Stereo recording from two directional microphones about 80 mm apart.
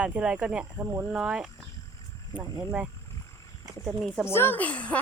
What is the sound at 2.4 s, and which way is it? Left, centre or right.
Speech, right.